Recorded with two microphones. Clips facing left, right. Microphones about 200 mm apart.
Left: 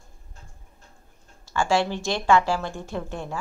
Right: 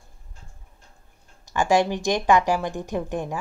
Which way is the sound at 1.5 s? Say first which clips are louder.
Right 3 dB; 15° right (ahead or behind).